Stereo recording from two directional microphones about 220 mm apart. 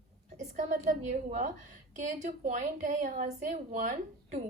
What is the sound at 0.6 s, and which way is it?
A woman's voice, 35° right (ahead or behind).